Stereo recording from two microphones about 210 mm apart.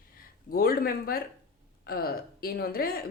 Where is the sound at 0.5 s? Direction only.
45° left (ahead or behind).